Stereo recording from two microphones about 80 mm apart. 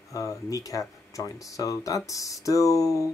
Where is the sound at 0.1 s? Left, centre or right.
Left.